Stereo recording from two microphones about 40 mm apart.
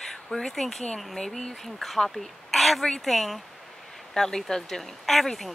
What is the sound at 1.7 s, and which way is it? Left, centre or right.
A woman's voice, centre.